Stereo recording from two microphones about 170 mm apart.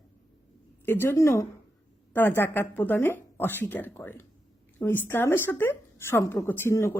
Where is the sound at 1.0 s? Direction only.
15° left (ahead or behind).